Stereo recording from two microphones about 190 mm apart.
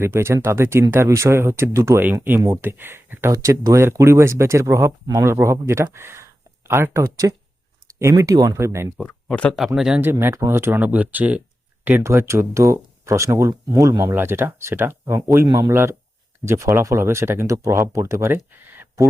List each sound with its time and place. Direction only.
0.0 s speech: 15° right (ahead or behind)
9.0 s speech: 5° left (ahead or behind); by 19.0 s 10° right (ahead or behind)